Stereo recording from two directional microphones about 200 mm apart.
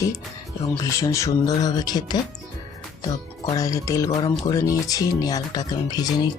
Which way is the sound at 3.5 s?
15° left (ahead or behind).